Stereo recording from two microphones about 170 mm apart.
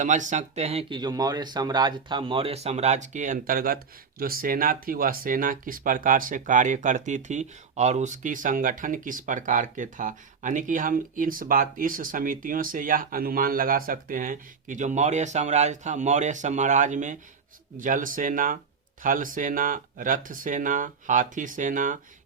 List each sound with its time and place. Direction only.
0.0 s speech: 45° right (ahead or behind)